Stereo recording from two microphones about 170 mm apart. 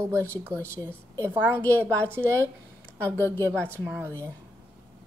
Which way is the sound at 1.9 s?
10° left (ahead or behind).